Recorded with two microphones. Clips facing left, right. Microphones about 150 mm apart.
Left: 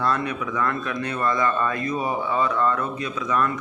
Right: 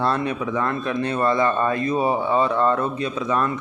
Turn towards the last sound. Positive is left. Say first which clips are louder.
# right 2 dB
turn(degrees=-30)  # may be behind; listen again after turning